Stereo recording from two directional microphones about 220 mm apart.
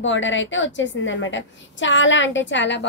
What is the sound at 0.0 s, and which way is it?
A woman's voice, 55° left (ahead or behind).